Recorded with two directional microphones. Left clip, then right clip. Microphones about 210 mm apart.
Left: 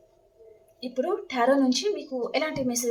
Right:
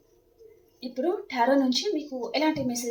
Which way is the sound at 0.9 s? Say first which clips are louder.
Left 1 dB; 15° left (ahead or behind).